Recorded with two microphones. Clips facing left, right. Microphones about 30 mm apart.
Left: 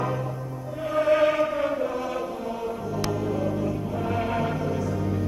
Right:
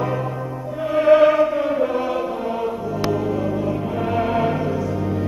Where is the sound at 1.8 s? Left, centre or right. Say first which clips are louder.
Right 7 dB; right.